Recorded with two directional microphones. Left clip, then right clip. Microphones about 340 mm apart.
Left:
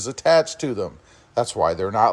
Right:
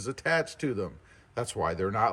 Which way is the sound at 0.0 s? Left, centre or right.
Centre.